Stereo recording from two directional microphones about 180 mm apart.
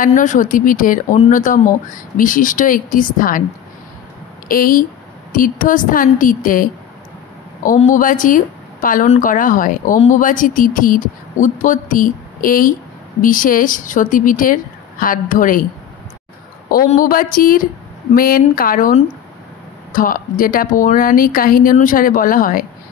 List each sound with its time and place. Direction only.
0.0 s speech: 45° left (ahead or behind)
4.5 s speech: 50° left (ahead or behind)
16.7 s speech: 50° left (ahead or behind)